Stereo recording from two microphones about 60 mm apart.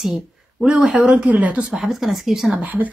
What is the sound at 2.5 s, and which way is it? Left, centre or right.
Speech, right.